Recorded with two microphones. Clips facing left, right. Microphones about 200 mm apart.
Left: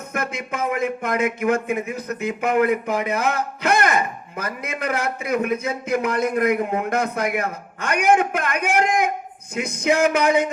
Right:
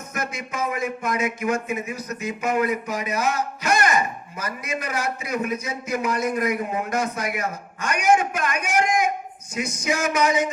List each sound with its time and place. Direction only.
0.1 s speech: 60° left (ahead or behind)